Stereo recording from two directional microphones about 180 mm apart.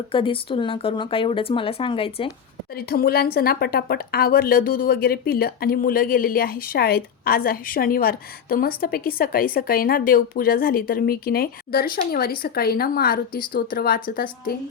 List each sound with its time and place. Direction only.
0.1 s speech: 30° left (ahead or behind)
2.7 s speech: 55° left (ahead or behind)